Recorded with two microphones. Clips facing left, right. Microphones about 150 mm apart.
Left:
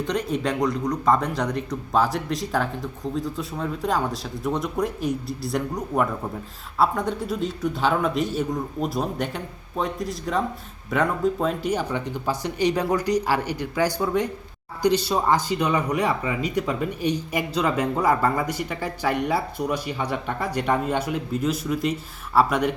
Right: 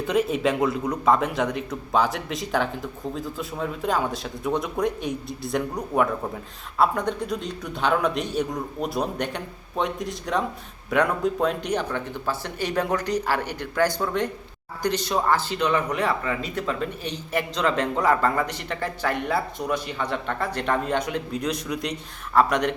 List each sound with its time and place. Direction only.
0.1 s speech: centre (ahead or behind)